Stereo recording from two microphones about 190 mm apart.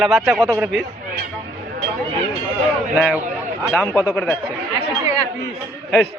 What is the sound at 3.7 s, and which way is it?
Speech, 10° left (ahead or behind).